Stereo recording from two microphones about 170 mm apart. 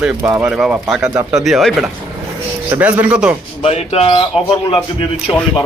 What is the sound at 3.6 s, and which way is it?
Speech, 40° left (ahead or behind).